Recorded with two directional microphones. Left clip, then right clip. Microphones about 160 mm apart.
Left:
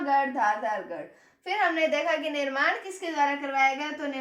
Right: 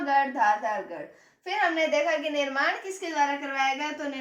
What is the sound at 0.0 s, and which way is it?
Speech, 20° left (ahead or behind).